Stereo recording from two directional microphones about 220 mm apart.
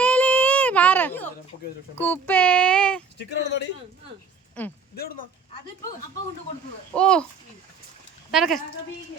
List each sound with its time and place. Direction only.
0.0 s a sound: 5° left (ahead or behind)
2.0 s speech: 10° left (ahead or behind)
3.2 s speech: 50° left (ahead or behind)
4.6 s speech: 5° left (ahead or behind)
5.0 s speech: 45° left (ahead or behind)
6.9 s a child's voice: 5° left (ahead or behind)
8.3 s a child's voice: centre (ahead or behind)